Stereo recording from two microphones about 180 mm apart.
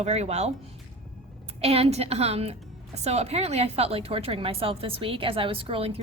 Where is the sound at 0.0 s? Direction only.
35° right (ahead or behind).